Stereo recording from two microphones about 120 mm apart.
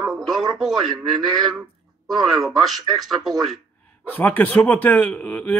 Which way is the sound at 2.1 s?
Centre (ahead or behind).